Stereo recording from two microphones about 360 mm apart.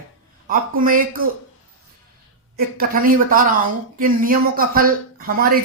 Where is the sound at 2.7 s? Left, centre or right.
Right.